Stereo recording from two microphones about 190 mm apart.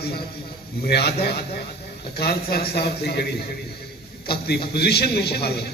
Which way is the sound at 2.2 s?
55° left (ahead or behind).